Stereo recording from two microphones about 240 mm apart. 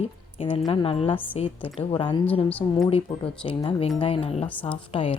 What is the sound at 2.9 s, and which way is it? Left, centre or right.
Speech, left.